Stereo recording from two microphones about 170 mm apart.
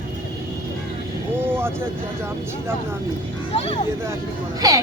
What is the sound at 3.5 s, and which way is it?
Speech, 35° left (ahead or behind).